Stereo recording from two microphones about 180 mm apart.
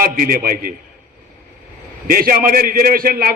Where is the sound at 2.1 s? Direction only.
55° right (ahead or behind).